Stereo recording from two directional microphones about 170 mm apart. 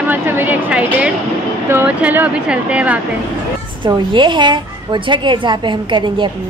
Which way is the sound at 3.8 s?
25° right (ahead or behind).